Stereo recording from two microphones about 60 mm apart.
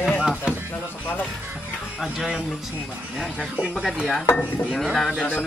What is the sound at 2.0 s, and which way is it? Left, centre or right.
Speech, centre.